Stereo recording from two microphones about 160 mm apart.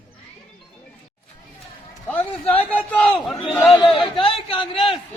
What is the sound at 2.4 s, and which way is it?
Speech, 5° left (ahead or behind).